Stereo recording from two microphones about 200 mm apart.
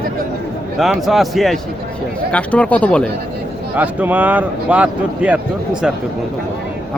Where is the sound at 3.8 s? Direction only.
10° right (ahead or behind).